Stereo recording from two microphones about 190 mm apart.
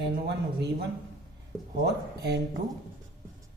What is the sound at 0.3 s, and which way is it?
Speech, 60° right (ahead or behind).